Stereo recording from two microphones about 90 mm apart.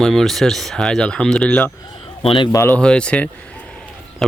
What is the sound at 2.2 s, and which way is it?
Speech, 75° left (ahead or behind).